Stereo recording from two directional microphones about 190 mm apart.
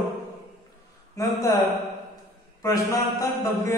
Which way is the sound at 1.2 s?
15° left (ahead or behind).